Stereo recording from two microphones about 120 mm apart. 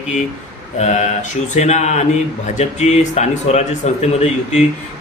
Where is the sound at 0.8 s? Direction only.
75° left (ahead or behind).